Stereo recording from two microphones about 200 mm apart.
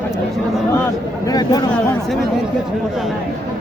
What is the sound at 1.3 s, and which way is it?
Speech, 20° left (ahead or behind).